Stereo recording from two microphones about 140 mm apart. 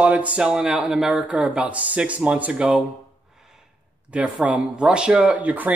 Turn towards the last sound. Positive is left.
turn(degrees=-10)  # may be behind; listen again after turning